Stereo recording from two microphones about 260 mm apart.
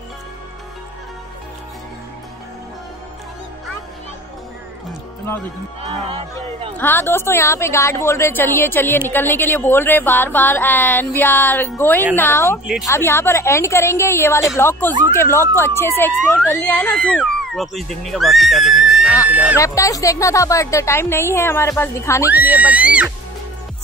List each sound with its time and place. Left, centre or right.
5.8 s speech: right
6.8 s a woman's voice: centre
19.6 s a woman's voice: centre
22.3 s speech: centre